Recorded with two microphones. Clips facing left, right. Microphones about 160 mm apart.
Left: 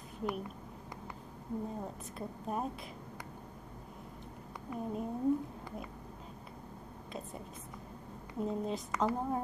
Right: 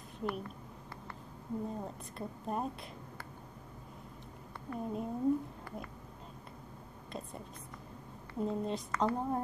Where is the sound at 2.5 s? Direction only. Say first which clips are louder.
Even; centre (ahead or behind).